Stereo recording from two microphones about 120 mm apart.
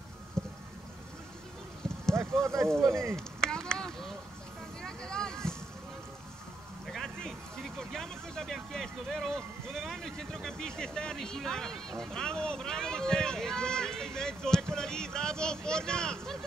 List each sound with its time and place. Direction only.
0.4 s vehicle: 5° left (ahead or behind)
2.4 s speech: 25° right (ahead or behind)
3.2 s a sound: 5° left (ahead or behind)
6.9 s speech: 5° left (ahead or behind)